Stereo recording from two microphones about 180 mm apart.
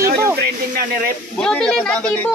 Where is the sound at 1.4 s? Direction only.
5° left (ahead or behind).